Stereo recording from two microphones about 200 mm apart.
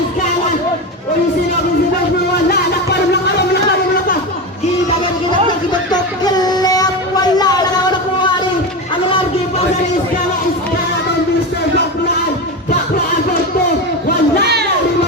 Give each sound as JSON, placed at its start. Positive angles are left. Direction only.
{"t": 5.9, "sound": "music", "side_deg": 20}
{"t": 14.4, "sound": "music", "side_deg": -55}